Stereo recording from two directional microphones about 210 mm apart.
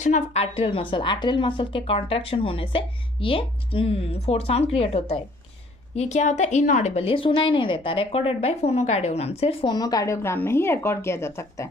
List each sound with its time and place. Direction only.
0.0 s a woman's voice: 30° left (ahead or behind); by 11.7 s 15° left (ahead or behind)